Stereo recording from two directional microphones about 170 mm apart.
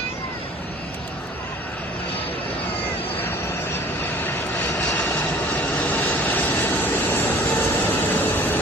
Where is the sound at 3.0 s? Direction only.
10° left (ahead or behind).